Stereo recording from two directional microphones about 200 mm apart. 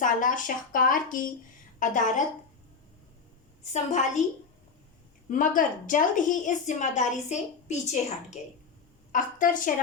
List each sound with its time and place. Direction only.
0.0 s a woman's voice: 40° left (ahead or behind)
3.6 s a woman's voice: 35° left (ahead or behind)
5.3 s a woman's voice: 40° left (ahead or behind)